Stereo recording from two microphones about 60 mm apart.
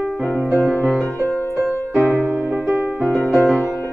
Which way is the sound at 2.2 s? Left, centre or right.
Right.